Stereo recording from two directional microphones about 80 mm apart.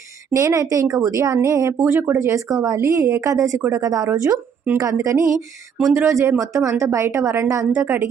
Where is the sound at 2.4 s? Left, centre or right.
Right.